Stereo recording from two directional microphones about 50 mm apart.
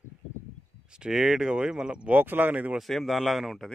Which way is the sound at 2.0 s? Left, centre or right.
Right.